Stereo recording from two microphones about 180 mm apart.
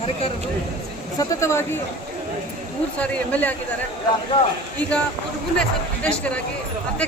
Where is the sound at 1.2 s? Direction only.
15° left (ahead or behind).